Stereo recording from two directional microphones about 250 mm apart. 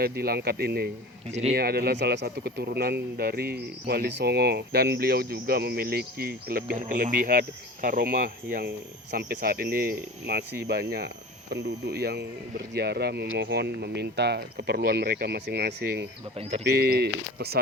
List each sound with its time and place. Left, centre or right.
0.0 s speech: right
1.3 s a man's voice: right
1.5 s speech: right